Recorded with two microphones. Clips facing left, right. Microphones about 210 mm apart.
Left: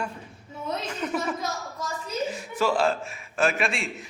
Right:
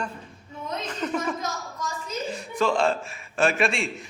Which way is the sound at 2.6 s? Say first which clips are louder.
Right 1 dB; 5° left (ahead or behind).